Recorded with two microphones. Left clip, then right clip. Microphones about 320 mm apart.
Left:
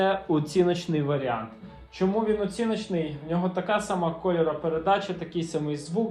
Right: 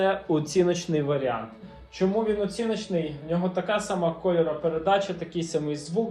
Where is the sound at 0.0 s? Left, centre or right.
Centre.